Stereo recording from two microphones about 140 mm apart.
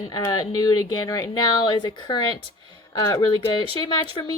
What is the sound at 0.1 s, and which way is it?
A woman's voice, 25° left (ahead or behind).